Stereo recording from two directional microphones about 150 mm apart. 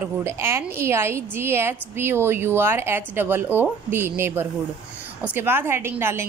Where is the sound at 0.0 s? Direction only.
20° right (ahead or behind).